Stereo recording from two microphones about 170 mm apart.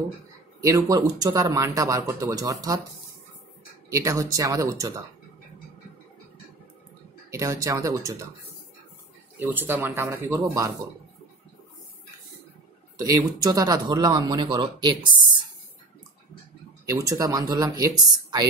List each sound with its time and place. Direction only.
0.6 s speech: 20° right (ahead or behind)
3.9 s speech: 20° right (ahead or behind)
7.2 s speech: 20° right (ahead or behind)
9.4 s speech: 10° right (ahead or behind)
13.0 s speech: 25° right (ahead or behind)
16.8 s speech: 20° right (ahead or behind)